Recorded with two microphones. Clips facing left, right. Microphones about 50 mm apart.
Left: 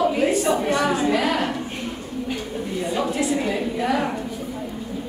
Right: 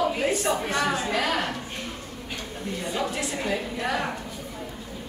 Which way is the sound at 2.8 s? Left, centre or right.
Centre.